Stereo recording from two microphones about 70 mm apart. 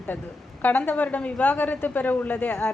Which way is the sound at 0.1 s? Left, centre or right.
Left.